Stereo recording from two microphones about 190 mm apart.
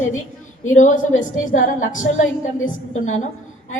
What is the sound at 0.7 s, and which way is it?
A woman's voice, 40° left (ahead or behind).